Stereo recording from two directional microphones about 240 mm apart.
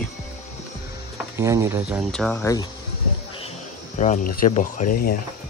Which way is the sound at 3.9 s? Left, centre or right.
Left.